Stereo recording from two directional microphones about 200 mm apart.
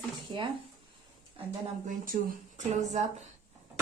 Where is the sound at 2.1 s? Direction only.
40° right (ahead or behind).